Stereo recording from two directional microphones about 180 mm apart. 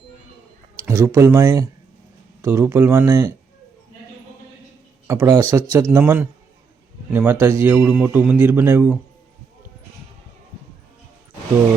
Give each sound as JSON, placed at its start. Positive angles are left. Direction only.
{"t": 0.8, "sound": "a man's voice", "side_deg": -15}
{"t": 5.0, "sound": "a man's voice", "side_deg": -15}